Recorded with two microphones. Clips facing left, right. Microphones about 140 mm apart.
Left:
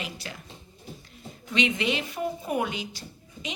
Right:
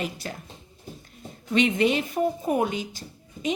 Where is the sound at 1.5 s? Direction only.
50° right (ahead or behind).